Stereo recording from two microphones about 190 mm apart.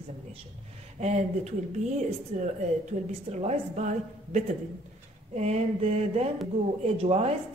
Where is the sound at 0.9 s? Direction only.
35° right (ahead or behind).